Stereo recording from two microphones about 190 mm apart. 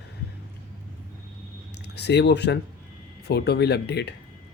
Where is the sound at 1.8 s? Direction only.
60° left (ahead or behind).